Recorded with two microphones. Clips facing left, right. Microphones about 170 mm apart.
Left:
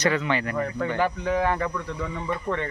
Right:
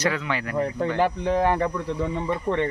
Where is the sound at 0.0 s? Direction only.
5° right (ahead or behind).